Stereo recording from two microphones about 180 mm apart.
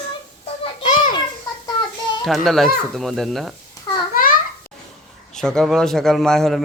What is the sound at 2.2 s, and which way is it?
Speech, centre (ahead or behind).